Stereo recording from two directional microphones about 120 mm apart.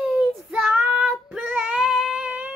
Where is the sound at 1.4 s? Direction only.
10° right (ahead or behind).